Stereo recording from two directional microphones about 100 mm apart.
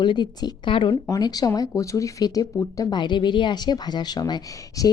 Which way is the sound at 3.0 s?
50° left (ahead or behind).